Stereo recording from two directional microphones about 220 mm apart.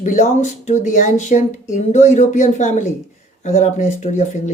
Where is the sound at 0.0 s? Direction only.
35° left (ahead or behind).